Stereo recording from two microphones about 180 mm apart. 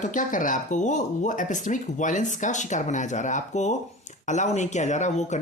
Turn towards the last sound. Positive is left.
turn(degrees=40)  # may be behind; listen again after turning